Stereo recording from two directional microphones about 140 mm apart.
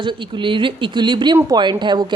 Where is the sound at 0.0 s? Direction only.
35° right (ahead or behind).